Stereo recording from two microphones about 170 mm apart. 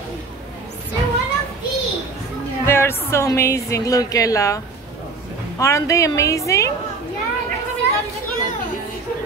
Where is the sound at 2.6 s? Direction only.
15° left (ahead or behind).